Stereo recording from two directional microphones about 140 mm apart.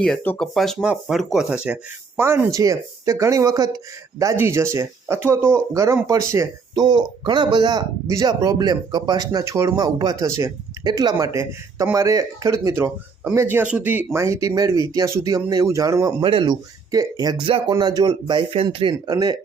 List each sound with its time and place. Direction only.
0.0 s speech: 10° left (ahead or behind); by 6.8 s 20° right (ahead or behind)
6.8 s speech: 35° right (ahead or behind)
18.5 s speech: 40° right (ahead or behind)